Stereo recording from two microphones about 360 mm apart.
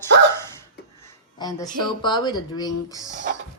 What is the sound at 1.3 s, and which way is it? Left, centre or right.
Music, centre.